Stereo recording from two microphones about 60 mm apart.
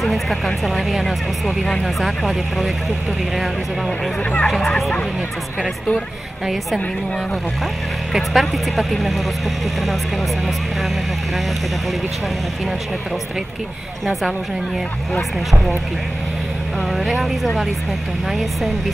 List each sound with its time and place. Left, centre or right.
0.0 s speech: centre
4.2 s speech: left
6.4 s speech: centre
8.1 s speech: centre
16.9 s speech: centre